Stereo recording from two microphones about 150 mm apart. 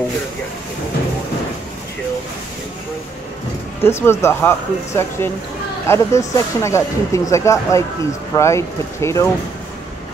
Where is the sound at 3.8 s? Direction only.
15° left (ahead or behind).